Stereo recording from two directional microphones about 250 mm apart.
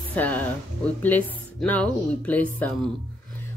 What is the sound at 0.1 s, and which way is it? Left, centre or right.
Speech, centre.